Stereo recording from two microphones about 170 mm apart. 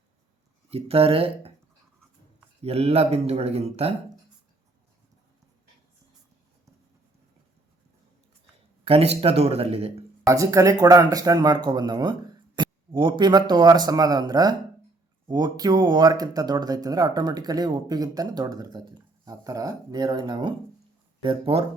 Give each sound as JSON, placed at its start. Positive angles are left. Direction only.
{"t": 0.7, "sound": "speech", "side_deg": -35}
{"t": 2.6, "sound": "speech", "side_deg": -35}
{"t": 8.8, "sound": "speech", "side_deg": -35}
{"t": 10.2, "sound": "speech", "side_deg": -20}